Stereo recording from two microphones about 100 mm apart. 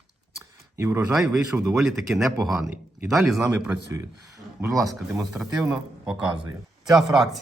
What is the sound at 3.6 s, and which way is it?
Speech, 30° right (ahead or behind).